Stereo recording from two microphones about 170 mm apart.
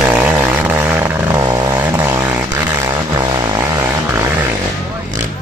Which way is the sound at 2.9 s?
25° right (ahead or behind).